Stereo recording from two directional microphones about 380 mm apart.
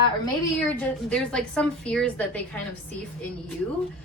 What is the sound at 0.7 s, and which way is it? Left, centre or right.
A woman's voice, centre.